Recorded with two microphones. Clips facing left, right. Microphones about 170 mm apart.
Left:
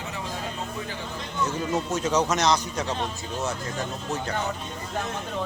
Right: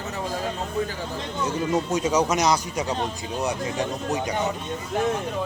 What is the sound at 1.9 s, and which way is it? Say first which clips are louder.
Speech: right 1 dB; 10° right (ahead or behind).